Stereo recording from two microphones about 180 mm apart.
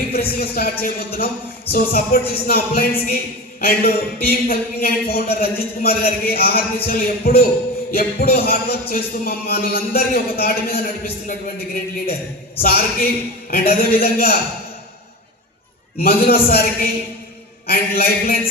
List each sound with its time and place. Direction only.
0.1 s speech: 55° left (ahead or behind)
16.0 s speech: 55° left (ahead or behind)